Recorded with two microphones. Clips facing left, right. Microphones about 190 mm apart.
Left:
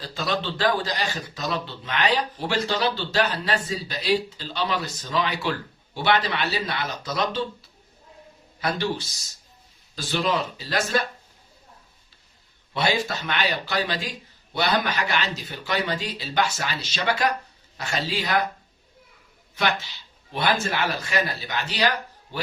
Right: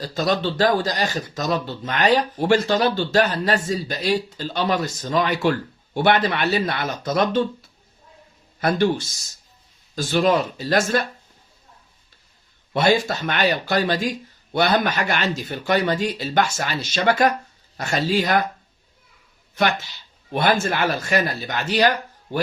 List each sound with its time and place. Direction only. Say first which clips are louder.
0.0 s a man's voice: right 6 dB; 40° right (ahead or behind)
8.6 s a man's voice: right 7 dB; 50° right (ahead or behind)
12.7 s a man's voice: right 6 dB; 50° right (ahead or behind)
20.3 s a man's voice: right 4 dB; 50° right (ahead or behind)